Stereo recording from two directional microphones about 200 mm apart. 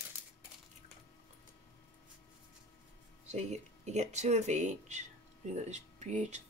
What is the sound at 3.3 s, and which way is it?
Speech, 35° right (ahead or behind).